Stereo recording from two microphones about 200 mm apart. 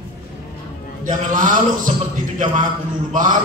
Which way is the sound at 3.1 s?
40° right (ahead or behind).